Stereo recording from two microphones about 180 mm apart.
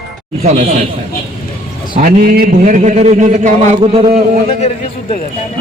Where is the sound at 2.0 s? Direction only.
50° right (ahead or behind).